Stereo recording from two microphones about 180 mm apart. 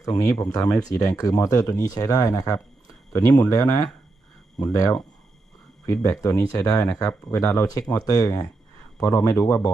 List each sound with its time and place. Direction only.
0.0 s speech: 20° left (ahead or behind)